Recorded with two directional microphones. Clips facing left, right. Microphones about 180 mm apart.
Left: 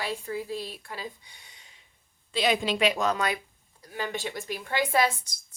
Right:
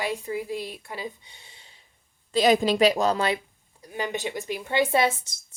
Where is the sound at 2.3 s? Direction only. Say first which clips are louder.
Right 6 dB; 40° right (ahead or behind).